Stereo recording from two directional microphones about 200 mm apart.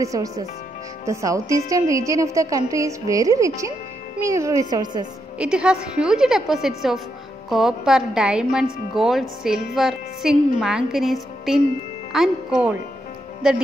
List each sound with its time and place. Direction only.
0.0 s a woman's voice: 15° right (ahead or behind)
5.4 s a woman's voice: 5° right (ahead or behind)